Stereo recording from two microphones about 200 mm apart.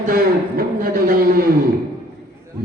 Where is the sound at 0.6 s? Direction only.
50° right (ahead or behind).